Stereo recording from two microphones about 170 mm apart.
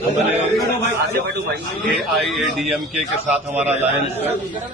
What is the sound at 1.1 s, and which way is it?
Speech, 75° right (ahead or behind).